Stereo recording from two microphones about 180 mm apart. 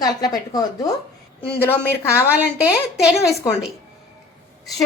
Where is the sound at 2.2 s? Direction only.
10° right (ahead or behind).